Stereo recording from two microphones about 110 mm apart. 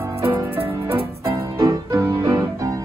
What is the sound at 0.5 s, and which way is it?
Music, 60° right (ahead or behind).